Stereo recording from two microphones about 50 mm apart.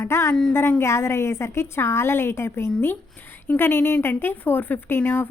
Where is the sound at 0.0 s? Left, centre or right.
Left.